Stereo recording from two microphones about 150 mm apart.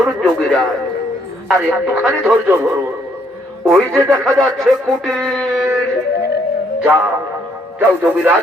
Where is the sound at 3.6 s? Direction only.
Centre (ahead or behind).